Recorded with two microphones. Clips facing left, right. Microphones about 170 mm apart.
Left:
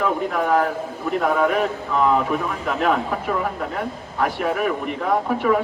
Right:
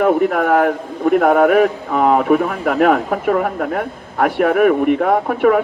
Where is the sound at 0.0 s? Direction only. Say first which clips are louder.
Right 7 dB; 55° right (ahead or behind).